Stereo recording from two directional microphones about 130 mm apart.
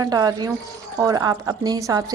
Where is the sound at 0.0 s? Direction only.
30° right (ahead or behind).